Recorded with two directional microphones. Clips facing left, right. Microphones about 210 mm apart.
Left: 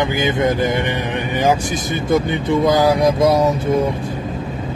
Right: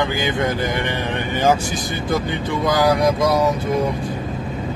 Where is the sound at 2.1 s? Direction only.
25° left (ahead or behind).